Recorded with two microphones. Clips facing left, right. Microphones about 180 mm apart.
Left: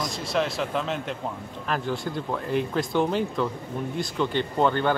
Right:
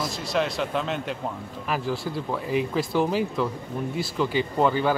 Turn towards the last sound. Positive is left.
turn(degrees=-5)  # may be behind; listen again after turning